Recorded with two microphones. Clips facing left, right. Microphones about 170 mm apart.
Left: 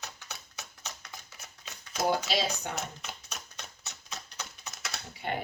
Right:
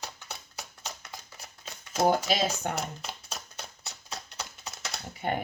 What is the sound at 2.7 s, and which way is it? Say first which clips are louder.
Typewriter: right 3 dB; 35° right (ahead or behind).